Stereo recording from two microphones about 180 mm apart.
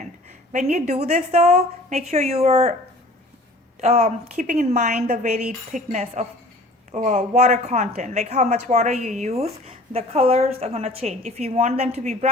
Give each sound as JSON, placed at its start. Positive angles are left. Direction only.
{"t": 0.5, "sound": "speech", "side_deg": -40}
{"t": 3.8, "sound": "speech", "side_deg": -35}